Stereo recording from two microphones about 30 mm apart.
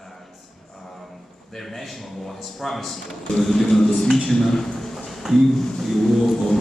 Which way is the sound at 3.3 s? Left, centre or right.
Centre.